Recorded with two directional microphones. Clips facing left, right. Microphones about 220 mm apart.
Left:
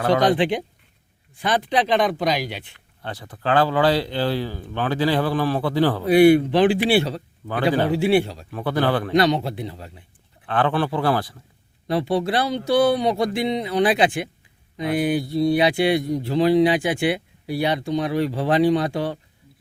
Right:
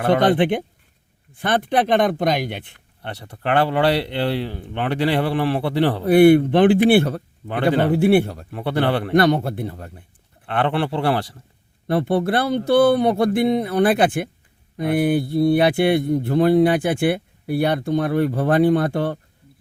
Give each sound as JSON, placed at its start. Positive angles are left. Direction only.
{"t": 0.0, "sound": "a man's voice", "side_deg": -25}
{"t": 0.3, "sound": "speech", "side_deg": -55}
{"t": 3.2, "sound": "a man's voice", "side_deg": -25}
{"t": 6.1, "sound": "speech", "side_deg": -55}
{"t": 7.4, "sound": "a man's voice", "side_deg": -25}
{"t": 7.9, "sound": "speech", "side_deg": -55}
{"t": 8.4, "sound": "a man's voice", "side_deg": -25}
{"t": 9.1, "sound": "speech", "side_deg": -55}
{"t": 10.6, "sound": "a man's voice", "side_deg": -25}
{"t": 11.9, "sound": "speech", "side_deg": -55}